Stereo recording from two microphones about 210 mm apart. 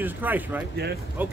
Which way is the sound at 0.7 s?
50° right (ahead or behind).